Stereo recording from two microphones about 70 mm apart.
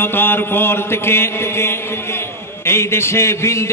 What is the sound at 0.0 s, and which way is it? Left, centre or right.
A man's voice, left.